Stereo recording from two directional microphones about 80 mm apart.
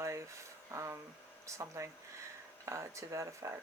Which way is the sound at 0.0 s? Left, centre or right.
Right.